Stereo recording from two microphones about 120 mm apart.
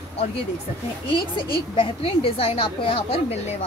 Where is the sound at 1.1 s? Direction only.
45° left (ahead or behind).